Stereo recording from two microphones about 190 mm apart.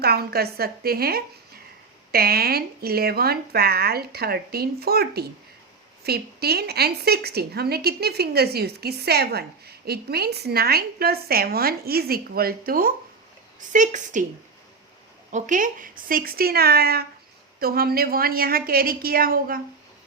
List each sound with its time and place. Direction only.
0.0 s a woman's voice: 55° right (ahead or behind)
15.3 s a woman's voice: 40° right (ahead or behind)